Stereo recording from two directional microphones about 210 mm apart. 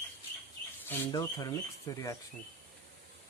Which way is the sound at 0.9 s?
15° left (ahead or behind).